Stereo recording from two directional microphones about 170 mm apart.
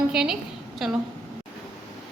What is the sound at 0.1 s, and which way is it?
Speech, 5° right (ahead or behind).